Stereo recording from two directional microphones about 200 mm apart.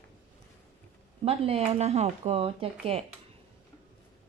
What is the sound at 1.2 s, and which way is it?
Speech, 30° right (ahead or behind).